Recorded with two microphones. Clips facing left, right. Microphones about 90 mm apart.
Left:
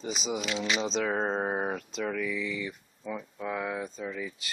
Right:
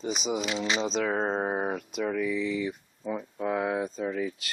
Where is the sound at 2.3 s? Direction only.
30° right (ahead or behind).